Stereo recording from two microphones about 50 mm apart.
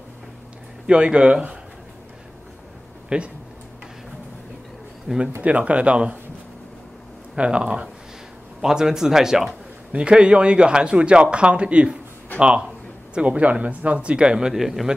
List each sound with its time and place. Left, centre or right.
0.8 s speech: centre
3.1 s speech: right
5.0 s speech: centre
5.4 s speech: right
7.3 s a man's voice: right
9.9 s speech: right
14.5 s a man's voice: centre